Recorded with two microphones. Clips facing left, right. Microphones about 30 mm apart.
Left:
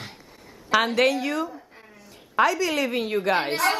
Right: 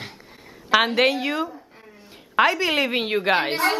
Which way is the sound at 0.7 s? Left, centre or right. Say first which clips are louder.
Right 2 dB; right.